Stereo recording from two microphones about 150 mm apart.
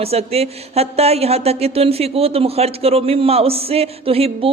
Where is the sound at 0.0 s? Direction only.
40° right (ahead or behind).